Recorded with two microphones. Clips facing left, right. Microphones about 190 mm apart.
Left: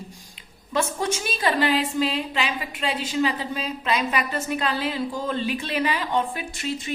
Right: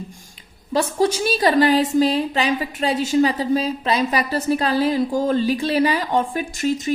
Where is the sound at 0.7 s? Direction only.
35° right (ahead or behind).